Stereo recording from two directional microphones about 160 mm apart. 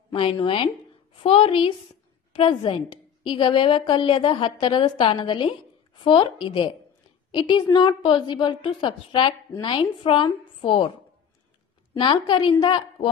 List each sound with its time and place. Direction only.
0.1 s a woman's voice: 35° left (ahead or behind)
11.9 s a woman's voice: 30° left (ahead or behind)